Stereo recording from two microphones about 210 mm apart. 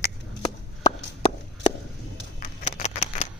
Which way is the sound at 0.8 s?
25° left (ahead or behind).